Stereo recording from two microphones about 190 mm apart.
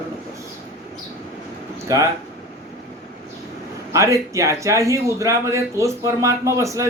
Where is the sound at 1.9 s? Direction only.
15° right (ahead or behind).